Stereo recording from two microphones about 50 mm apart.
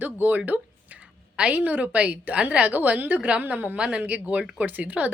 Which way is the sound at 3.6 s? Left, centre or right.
Centre.